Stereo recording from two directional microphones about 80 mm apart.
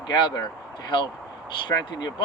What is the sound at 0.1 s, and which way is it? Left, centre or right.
Speech, left.